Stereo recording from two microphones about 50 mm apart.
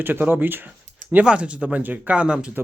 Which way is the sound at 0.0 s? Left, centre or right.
Right.